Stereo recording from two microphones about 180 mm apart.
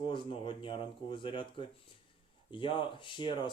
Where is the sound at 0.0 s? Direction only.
25° left (ahead or behind).